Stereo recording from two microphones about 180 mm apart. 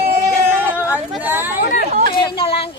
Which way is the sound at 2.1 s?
25° left (ahead or behind).